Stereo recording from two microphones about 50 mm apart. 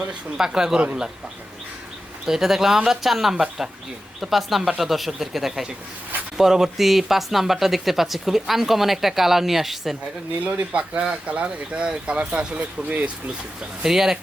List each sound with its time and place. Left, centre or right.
0.3 s speech: centre
2.2 s speech: centre
10.4 s speech: right
13.8 s speech: centre